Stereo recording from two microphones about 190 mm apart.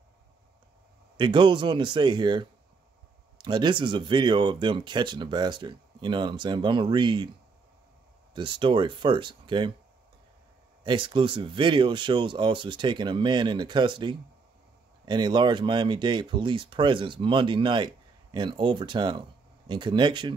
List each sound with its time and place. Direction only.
1.1 s speech: 25° right (ahead or behind)
8.4 s speech: 25° right (ahead or behind)
10.8 s speech: 25° right (ahead or behind)